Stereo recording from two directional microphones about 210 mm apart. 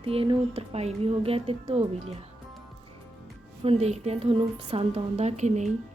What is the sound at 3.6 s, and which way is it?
A woman's voice, 30° right (ahead or behind).